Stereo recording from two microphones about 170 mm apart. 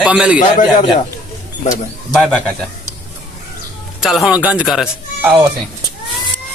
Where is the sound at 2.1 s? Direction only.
Centre (ahead or behind).